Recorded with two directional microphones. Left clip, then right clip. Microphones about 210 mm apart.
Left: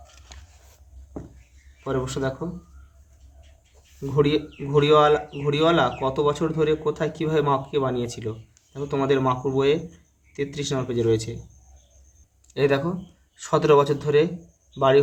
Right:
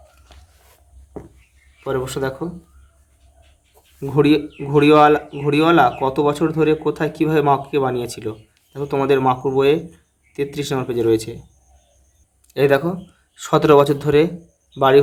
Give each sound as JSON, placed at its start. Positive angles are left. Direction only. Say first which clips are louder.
{"t": 1.8, "sound": "speech", "louder": "right 4 dB", "side_deg": -25}
{"t": 4.0, "sound": "speech", "louder": "right 6 dB", "side_deg": -30}
{"t": 12.5, "sound": "speech", "louder": "right 6 dB", "side_deg": -25}